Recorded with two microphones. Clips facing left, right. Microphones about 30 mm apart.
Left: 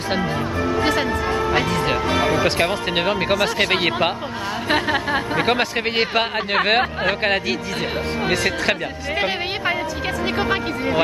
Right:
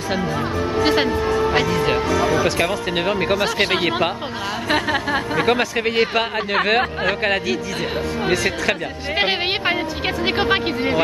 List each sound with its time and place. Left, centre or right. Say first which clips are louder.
0.8 s speech: right 4 dB; right
1.7 s speech: right 2 dB; centre
2.0 s speech: right 1 dB; left
2.4 s speech: even; left; by 5.2 s centre
5.3 s speech: right 2 dB; centre
10.2 s speech: right 3 dB; right